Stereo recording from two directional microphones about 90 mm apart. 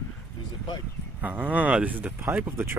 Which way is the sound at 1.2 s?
20° right (ahead or behind).